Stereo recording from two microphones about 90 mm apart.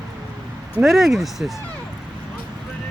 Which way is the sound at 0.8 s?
Centre (ahead or behind).